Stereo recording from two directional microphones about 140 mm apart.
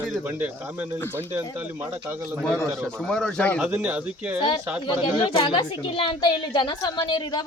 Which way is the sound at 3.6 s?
10° right (ahead or behind).